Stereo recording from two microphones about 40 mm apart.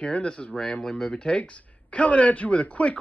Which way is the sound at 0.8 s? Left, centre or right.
Centre.